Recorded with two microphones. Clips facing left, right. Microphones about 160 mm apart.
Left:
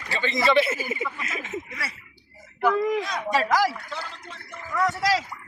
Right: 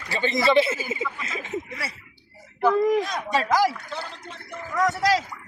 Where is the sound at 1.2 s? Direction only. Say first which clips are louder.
Right 2 dB; 30° right (ahead or behind).